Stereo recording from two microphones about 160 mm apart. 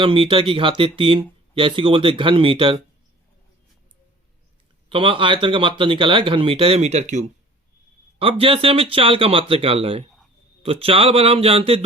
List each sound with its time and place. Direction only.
0.0 s speech: 35° right (ahead or behind)
4.9 s speech: 30° right (ahead or behind)